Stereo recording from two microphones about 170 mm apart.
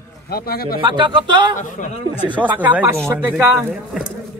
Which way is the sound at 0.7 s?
25° right (ahead or behind).